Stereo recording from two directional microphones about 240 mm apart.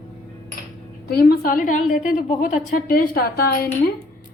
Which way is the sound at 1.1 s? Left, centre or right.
Left.